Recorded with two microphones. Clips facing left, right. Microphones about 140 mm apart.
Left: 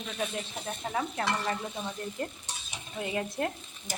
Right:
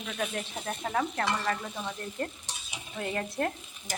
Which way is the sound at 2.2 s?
15° left (ahead or behind).